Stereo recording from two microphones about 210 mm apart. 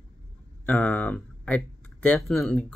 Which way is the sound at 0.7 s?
5° left (ahead or behind).